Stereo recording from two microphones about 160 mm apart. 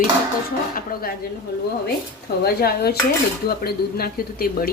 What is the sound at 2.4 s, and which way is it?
Speech, 80° left.